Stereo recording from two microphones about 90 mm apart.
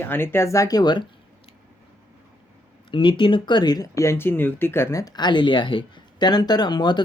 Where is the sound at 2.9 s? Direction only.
65° left (ahead or behind); by 5.0 s 30° left (ahead or behind).